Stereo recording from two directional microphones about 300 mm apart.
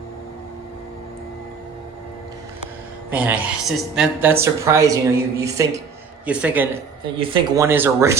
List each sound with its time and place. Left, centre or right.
3.1 s speech: centre